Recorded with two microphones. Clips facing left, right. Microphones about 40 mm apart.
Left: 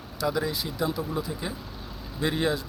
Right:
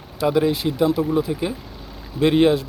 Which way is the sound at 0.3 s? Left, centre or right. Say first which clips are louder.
Right 9 dB; right.